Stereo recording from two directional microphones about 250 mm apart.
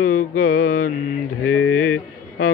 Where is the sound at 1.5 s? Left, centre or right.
Left.